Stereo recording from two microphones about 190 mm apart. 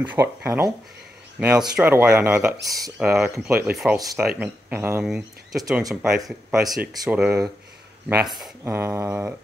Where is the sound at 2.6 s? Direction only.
20° right (ahead or behind).